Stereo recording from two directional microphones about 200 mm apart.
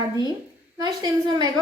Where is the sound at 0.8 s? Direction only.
20° right (ahead or behind).